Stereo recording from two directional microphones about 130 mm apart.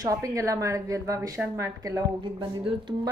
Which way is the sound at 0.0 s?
25° right (ahead or behind).